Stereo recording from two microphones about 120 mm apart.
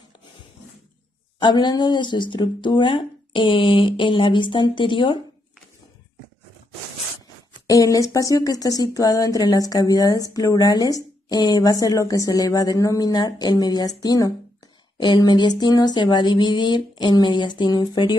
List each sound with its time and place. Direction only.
1.4 s a woman's voice: 40° left (ahead or behind)
7.6 s a woman's voice: 30° left (ahead or behind)